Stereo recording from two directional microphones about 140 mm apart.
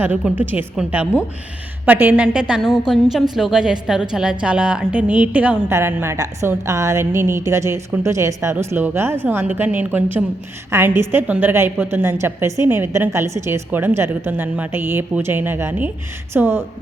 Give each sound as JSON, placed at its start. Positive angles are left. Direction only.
{"t": 0.0, "sound": "a woman's voice", "side_deg": -15}